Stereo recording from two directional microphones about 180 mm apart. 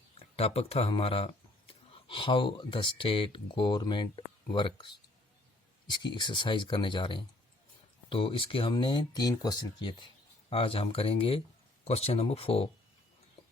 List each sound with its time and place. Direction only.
0.3 s speech: 35° left (ahead or behind)